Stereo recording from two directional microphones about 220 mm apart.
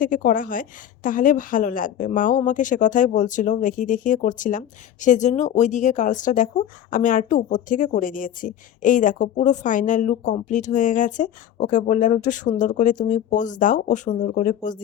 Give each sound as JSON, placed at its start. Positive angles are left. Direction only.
{"t": 0.0, "sound": "a woman's voice", "side_deg": 40}